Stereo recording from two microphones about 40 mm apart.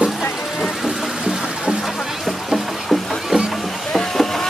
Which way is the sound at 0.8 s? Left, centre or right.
Centre.